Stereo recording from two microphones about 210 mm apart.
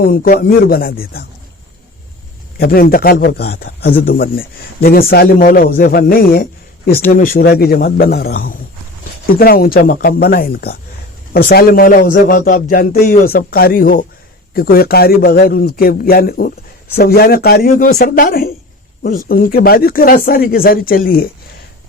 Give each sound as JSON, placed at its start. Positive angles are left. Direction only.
{"t": 0.0, "sound": "a man's voice", "side_deg": 40}
{"t": 2.6, "sound": "a man's voice", "side_deg": 45}